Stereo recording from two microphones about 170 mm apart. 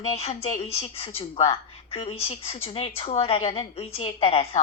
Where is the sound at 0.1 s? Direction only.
40° left (ahead or behind).